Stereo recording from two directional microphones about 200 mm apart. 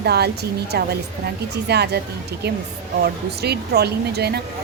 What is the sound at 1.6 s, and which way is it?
Speech, 55° right (ahead or behind).